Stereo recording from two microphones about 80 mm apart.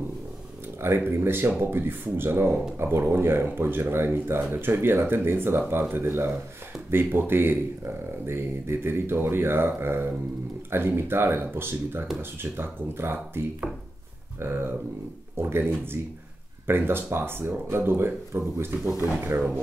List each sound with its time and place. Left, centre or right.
0.7 s speech: right
14.4 s speech: right